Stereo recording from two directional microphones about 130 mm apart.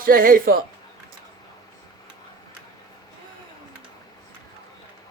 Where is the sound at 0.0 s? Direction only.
90° right.